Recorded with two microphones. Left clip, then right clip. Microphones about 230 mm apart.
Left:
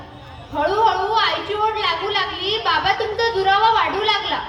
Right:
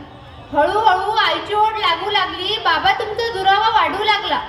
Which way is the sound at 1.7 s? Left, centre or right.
Right.